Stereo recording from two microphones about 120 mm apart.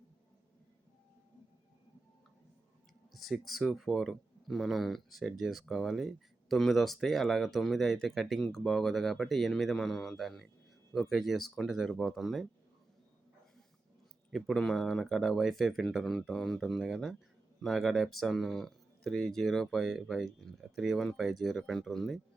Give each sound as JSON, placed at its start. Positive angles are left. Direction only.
{"t": 3.2, "sound": "speech", "side_deg": 0}
{"t": 14.3, "sound": "speech", "side_deg": 0}